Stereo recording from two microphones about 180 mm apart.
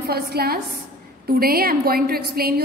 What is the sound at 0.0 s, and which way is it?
A woman's voice, 60° right (ahead or behind).